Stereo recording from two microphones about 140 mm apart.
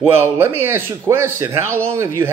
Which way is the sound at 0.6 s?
15° right (ahead or behind).